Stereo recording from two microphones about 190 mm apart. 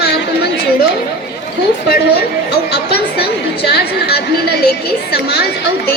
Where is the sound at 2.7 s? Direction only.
60° left (ahead or behind).